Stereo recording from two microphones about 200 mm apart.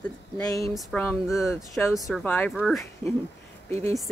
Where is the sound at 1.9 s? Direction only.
Centre (ahead or behind).